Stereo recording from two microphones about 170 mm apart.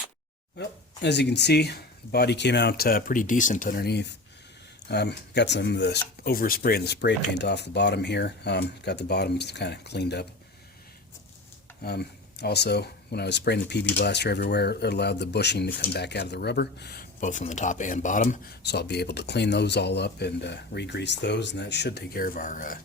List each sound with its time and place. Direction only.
0.6 s speech: 85° left
11.8 s speech: 70° left (ahead or behind); by 18.3 s 50° left (ahead or behind)
18.6 s speech: 80° left; by 22.8 s 50° left (ahead or behind)